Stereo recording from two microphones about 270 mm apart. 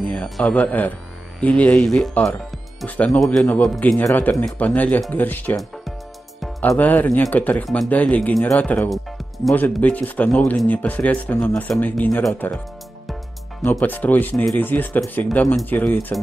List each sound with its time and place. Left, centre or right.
0.1 s a man's voice: centre
13.6 s speech: centre